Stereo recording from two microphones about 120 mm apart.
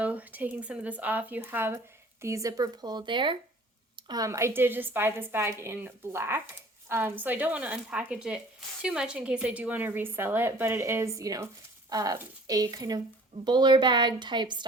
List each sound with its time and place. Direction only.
0.0 s a woman's voice: 10° right (ahead or behind); by 3.3 s 45° right (ahead or behind)
4.1 s a woman's voice: 25° right (ahead or behind)